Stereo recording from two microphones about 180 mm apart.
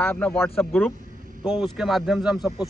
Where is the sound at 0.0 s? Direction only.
10° left (ahead or behind).